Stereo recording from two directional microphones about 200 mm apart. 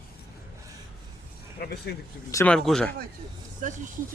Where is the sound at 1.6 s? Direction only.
50° left (ahead or behind).